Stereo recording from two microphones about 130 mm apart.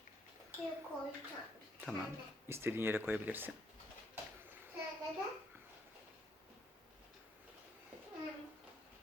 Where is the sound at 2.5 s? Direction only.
20° right (ahead or behind).